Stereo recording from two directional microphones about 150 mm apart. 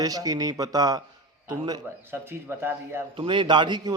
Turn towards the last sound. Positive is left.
turn(degrees=-30)  # may be behind; listen again after turning